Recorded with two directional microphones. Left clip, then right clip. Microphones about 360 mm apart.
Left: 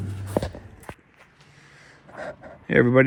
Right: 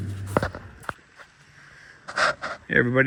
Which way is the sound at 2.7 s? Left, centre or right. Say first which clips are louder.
Left 3 dB; left.